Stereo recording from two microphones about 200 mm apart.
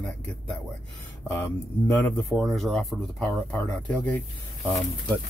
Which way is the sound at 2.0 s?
5° left (ahead or behind).